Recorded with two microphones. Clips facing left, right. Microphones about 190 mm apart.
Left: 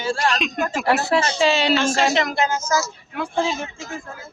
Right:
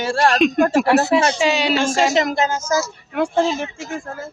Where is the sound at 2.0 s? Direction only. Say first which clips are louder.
Right 3 dB; 40° right (ahead or behind).